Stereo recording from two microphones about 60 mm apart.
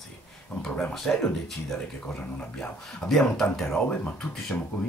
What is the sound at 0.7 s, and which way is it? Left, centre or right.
Speech, centre.